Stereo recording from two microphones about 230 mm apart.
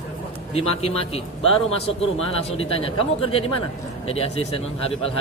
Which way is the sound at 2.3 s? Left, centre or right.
Left.